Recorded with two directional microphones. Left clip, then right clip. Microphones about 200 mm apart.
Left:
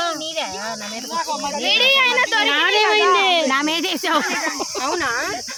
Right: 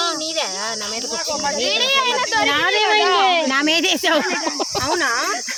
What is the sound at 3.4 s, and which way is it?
Speech, 5° right (ahead or behind).